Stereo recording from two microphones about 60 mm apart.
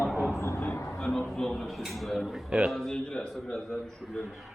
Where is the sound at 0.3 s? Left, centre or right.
Left.